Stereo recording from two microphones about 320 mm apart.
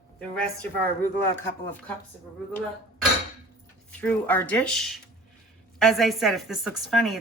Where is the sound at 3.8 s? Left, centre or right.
Centre.